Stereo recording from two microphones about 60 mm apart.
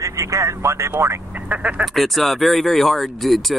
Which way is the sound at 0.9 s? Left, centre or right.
Right.